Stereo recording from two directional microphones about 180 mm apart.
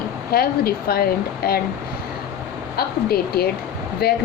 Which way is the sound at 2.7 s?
60° left (ahead or behind).